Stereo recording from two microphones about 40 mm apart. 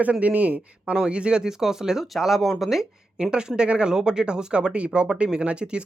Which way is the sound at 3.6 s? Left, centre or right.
Right.